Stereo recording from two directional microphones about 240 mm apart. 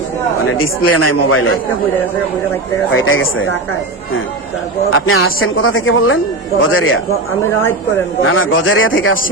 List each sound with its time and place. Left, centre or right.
0.4 s speech: left
2.9 s speech: left
4.9 s speech: left
8.2 s speech: left